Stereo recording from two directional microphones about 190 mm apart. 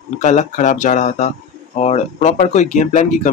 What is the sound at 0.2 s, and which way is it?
Speech, 40° left (ahead or behind).